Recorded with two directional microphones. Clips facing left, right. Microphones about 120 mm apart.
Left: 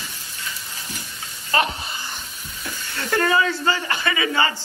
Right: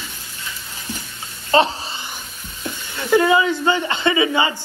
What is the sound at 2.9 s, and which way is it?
Speech, 15° right (ahead or behind).